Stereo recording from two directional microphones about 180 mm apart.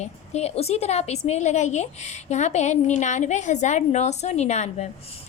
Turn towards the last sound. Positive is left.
turn(degrees=40)  # may be behind; listen again after turning